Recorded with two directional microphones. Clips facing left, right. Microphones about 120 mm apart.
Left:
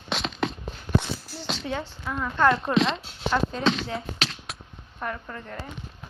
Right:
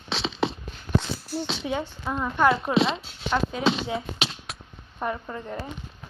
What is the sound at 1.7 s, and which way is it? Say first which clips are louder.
Speech: right 2 dB; 15° right (ahead or behind).